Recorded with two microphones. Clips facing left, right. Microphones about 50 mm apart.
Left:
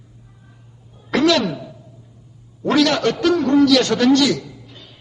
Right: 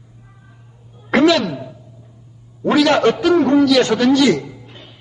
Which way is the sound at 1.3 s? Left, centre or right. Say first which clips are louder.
Even; centre.